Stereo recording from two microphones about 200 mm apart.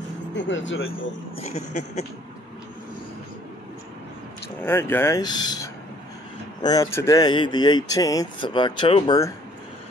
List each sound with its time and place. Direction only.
0.4 s speech: 70° left (ahead or behind)
1.4 s a sound: 35° left (ahead or behind)
4.6 s speech: 10° left (ahead or behind)